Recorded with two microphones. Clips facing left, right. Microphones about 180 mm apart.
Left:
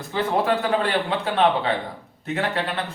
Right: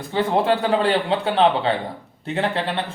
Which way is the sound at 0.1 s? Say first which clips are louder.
Right 3 dB; 30° right (ahead or behind).